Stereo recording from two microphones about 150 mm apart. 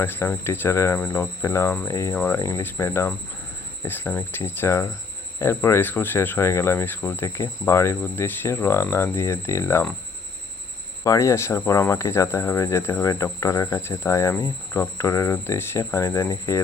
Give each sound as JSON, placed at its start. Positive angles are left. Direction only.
{"t": 0.0, "sound": "speech", "side_deg": 15}
{"t": 11.0, "sound": "speech", "side_deg": 20}